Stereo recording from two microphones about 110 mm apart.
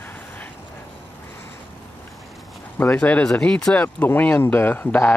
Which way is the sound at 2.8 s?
15° left (ahead or behind).